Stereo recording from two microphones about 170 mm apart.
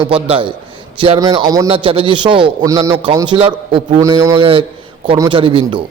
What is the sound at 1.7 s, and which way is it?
Speech, 30° right (ahead or behind).